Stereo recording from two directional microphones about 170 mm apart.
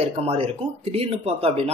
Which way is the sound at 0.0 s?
40° right (ahead or behind).